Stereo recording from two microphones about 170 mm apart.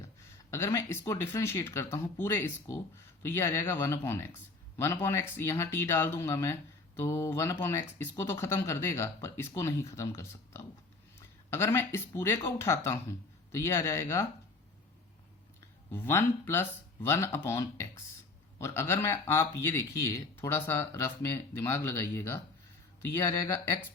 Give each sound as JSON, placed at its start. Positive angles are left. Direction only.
{"t": 0.5, "sound": "speech", "side_deg": 15}
{"t": 15.9, "sound": "speech", "side_deg": 15}